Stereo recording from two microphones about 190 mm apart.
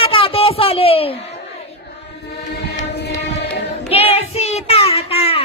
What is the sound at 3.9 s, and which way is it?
Child singing, 35° left (ahead or behind).